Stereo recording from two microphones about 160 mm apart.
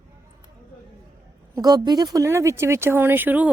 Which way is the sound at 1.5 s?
25° right (ahead or behind).